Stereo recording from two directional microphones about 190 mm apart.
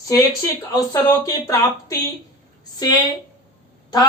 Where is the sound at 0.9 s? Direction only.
20° left (ahead or behind).